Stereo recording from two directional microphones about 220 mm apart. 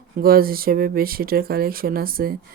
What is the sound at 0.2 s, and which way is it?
Speech, 40° right (ahead or behind).